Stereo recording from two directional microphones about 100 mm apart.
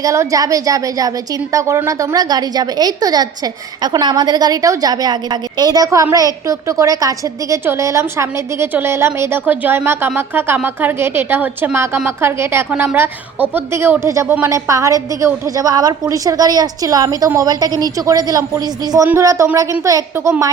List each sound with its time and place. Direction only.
0.0 s a woman's voice: 35° right (ahead or behind)
19.0 s a woman's voice: 30° right (ahead or behind)